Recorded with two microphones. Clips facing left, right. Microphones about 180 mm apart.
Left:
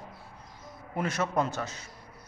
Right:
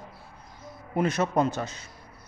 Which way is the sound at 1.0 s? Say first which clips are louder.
Right 5 dB; 20° right (ahead or behind).